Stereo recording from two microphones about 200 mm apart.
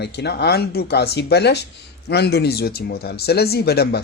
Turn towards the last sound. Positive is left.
turn(degrees=55)  # may be behind; listen again after turning